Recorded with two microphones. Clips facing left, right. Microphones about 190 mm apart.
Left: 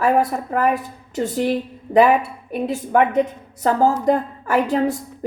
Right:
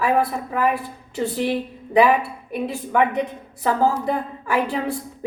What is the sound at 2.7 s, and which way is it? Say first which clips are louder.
A woman's voice: left 4 dB; 45° left (ahead or behind).